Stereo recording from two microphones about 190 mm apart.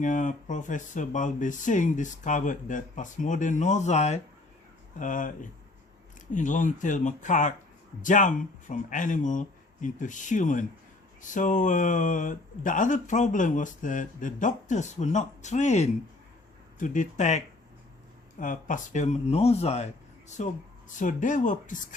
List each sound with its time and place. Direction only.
0.0 s speech: 40° left (ahead or behind)